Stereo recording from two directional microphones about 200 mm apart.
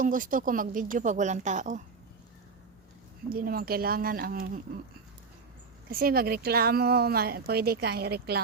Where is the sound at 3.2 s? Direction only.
45° right (ahead or behind).